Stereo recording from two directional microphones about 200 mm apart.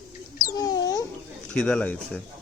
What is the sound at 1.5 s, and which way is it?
Speech, 5° left (ahead or behind).